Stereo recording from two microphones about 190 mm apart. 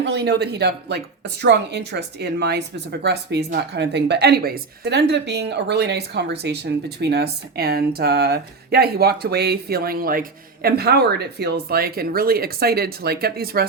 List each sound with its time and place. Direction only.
0.0 s speech: 65° right (ahead or behind)